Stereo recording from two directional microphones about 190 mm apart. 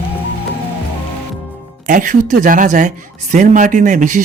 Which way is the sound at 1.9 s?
45° right (ahead or behind).